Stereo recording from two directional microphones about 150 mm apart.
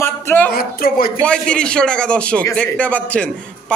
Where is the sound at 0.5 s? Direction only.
80° left.